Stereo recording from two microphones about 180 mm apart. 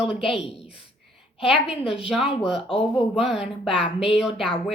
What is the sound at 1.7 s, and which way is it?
Speech, 5° right (ahead or behind).